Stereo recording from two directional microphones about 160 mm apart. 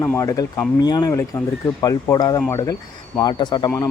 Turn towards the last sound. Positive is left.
turn(degrees=25)  # may be behind; listen again after turning